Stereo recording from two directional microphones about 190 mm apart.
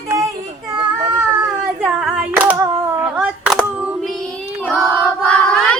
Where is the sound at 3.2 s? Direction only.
5° right (ahead or behind).